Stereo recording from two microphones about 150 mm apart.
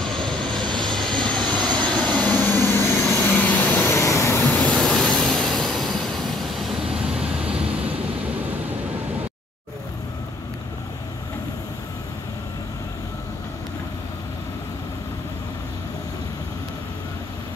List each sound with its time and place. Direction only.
0.0 s vehicle: 5° left (ahead or behind); by 4.4 s 20° left (ahead or behind)
4.4 s vehicle: 10° left (ahead or behind)